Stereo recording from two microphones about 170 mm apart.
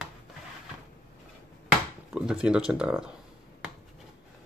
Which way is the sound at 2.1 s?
5° right (ahead or behind).